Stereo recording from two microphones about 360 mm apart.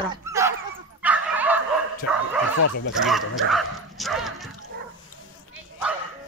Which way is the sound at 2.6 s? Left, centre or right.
Left.